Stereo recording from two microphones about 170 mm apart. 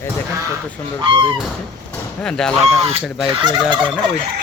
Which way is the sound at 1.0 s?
30° right (ahead or behind).